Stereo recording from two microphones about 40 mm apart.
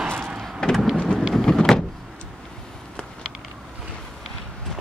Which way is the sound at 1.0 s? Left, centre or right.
Centre.